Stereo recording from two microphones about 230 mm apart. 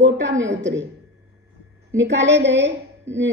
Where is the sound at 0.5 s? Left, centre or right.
Right.